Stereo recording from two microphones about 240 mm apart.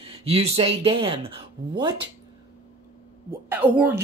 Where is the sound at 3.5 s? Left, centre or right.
Centre.